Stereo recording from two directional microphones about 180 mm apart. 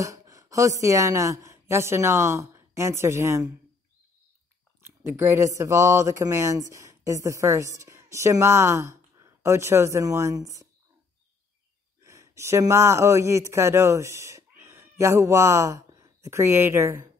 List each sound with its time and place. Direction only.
0.0 s a woman's voice: 20° right (ahead or behind)
4.8 s a woman's voice: 15° right (ahead or behind)
12.0 s speech: 15° right (ahead or behind)